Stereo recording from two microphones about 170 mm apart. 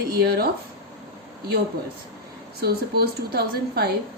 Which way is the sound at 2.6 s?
70° right (ahead or behind).